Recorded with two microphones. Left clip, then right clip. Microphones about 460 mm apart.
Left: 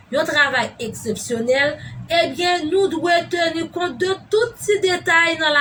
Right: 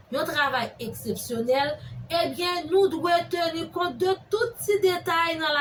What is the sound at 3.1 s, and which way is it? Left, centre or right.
Music, right.